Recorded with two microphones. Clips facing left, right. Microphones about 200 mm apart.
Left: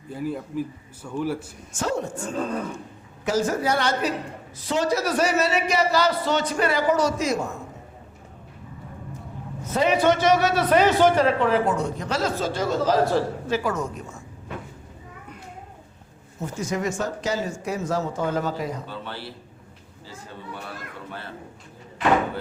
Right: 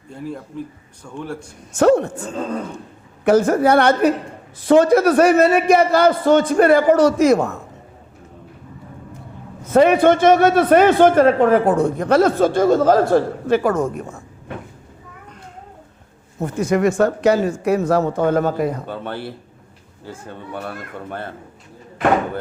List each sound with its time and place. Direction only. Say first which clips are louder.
0.1 s a man's voice: left 1 dB; 5° left (ahead or behind)
1.7 s a man's voice: right 12 dB; 60° right (ahead or behind)
3.2 s a man's voice: right 9 dB; 60° right (ahead or behind)
9.7 s a man's voice: right 8 dB; 55° right (ahead or behind)
16.4 s a man's voice: right 9 dB; 60° right (ahead or behind)